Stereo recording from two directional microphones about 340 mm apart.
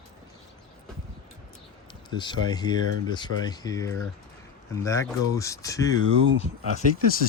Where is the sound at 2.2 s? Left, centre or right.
Centre.